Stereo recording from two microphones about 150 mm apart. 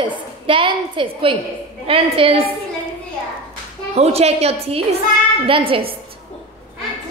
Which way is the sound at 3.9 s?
45° right (ahead or behind).